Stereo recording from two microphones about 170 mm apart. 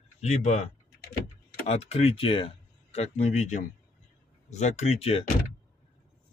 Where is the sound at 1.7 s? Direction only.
35° left (ahead or behind).